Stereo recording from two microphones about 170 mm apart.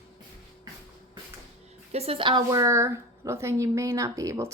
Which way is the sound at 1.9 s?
35° right (ahead or behind).